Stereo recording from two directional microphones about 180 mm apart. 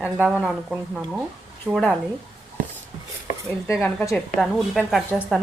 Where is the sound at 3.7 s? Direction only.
Centre (ahead or behind).